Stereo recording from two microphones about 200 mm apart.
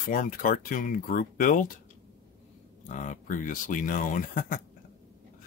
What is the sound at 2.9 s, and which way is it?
Speech, 40° left (ahead or behind).